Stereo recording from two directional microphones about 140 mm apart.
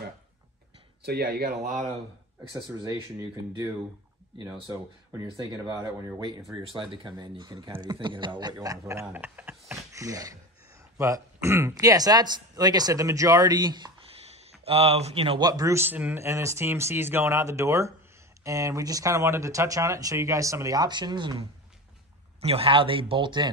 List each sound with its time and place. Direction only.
1.2 s speech: 85° right; by 1.9 s 65° right (ahead or behind)
2.5 s speech: 25° right (ahead or behind)
14.1 s a sound: 45° right (ahead or behind)
15.4 s speech: 25° right (ahead or behind)
22.4 s speech: 45° right (ahead or behind)